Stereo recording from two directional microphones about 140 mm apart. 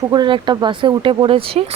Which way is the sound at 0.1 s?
35° right (ahead or behind).